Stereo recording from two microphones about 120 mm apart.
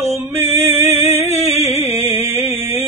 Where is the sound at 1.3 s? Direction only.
60° left (ahead or behind).